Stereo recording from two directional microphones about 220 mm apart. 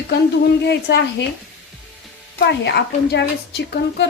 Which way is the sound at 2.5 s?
50° left (ahead or behind).